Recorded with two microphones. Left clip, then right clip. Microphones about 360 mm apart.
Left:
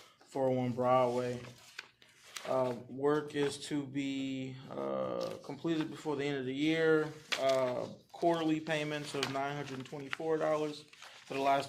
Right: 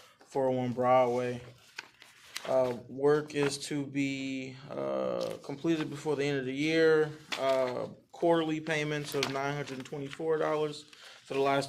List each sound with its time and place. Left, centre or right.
0.3 s speech: right
2.3 s a sound: right
3.0 s speech: right